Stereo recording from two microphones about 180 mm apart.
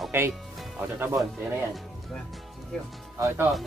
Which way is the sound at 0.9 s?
10° right (ahead or behind).